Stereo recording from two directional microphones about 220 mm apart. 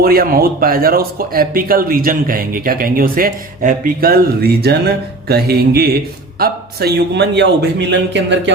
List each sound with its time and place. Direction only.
0.0 s speech: 40° right (ahead or behind)